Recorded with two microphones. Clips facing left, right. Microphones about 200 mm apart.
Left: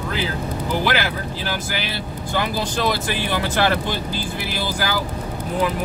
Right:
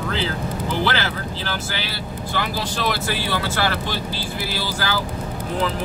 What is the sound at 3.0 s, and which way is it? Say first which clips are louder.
Speech: left 1 dB; 15° left (ahead or behind).